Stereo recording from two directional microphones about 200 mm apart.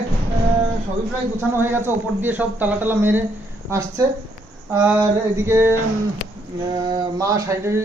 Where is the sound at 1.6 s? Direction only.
10° right (ahead or behind).